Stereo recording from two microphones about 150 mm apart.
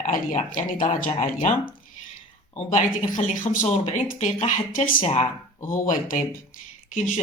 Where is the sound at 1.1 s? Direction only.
50° left (ahead or behind).